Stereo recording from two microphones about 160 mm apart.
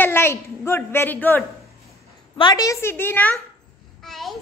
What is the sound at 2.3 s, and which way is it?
A woman's voice, 25° left (ahead or behind).